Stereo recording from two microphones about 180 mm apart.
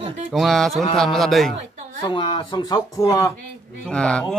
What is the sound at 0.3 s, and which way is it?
Speech, centre (ahead or behind).